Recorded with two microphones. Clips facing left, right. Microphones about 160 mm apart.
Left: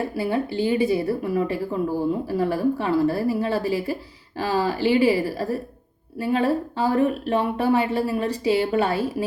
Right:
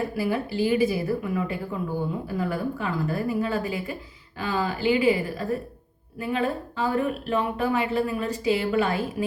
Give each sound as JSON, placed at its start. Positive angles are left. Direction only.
{"t": 0.2, "sound": "speech", "side_deg": 30}